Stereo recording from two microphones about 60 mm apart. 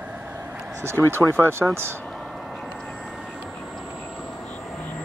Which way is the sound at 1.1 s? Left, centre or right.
Right.